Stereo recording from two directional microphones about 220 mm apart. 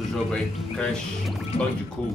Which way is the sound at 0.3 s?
5° left (ahead or behind).